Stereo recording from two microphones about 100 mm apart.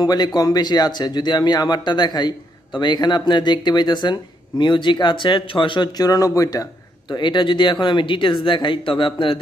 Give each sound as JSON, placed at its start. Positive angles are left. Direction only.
{"t": 0.0, "sound": "speech", "side_deg": 40}
{"t": 5.9, "sound": "speech", "side_deg": 40}